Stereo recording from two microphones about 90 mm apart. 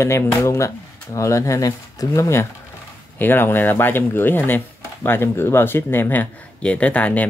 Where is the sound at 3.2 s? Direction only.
25° left (ahead or behind).